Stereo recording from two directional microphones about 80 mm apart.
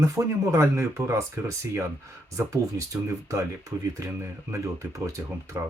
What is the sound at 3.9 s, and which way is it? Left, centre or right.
Speech, right.